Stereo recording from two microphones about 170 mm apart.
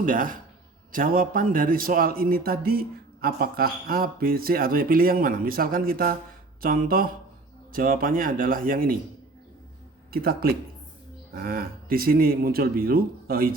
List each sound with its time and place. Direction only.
0.0 s speech: 55° right (ahead or behind)
10.1 s speech: 60° right (ahead or behind)